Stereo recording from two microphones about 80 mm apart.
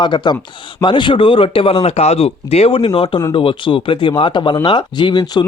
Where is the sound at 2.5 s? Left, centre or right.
Left.